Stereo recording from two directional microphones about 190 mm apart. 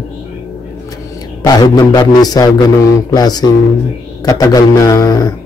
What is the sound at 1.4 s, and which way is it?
Speech, 20° left (ahead or behind).